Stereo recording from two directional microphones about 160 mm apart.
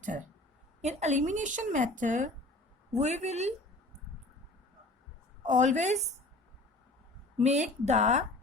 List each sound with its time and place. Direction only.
0.0 s speech: 55° right (ahead or behind)
5.5 s speech: 50° right (ahead or behind)
7.3 s speech: 45° right (ahead or behind)